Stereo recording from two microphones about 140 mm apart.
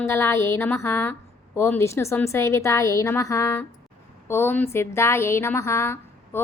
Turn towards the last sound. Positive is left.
turn(degrees=15)  # may be behind; listen again after turning